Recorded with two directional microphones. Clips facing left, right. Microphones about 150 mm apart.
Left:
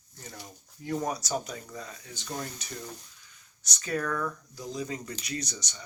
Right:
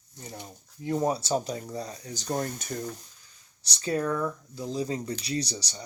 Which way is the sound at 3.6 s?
30° right (ahead or behind).